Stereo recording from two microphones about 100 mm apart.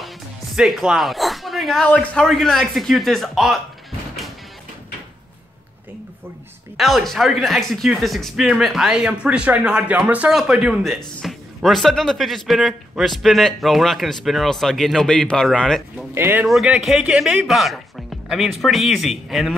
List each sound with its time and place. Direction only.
0.0 s music: centre (ahead or behind)
2.1 s speech: 5° left (ahead or behind)
6.8 s speech: centre (ahead or behind)
16.2 s speech: 20° right (ahead or behind)
16.6 s speech: 10° right (ahead or behind)